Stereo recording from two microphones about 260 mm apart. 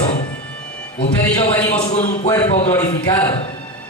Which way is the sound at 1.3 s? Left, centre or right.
Centre.